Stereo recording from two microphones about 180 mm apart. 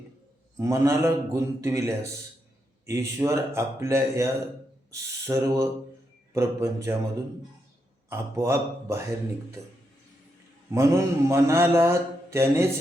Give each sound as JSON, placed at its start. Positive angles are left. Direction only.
{"t": 0.5, "sound": "speech", "side_deg": -15}
{"t": 2.8, "sound": "speech", "side_deg": -15}
{"t": 8.1, "sound": "speech", "side_deg": -15}
{"t": 10.7, "sound": "speech", "side_deg": -15}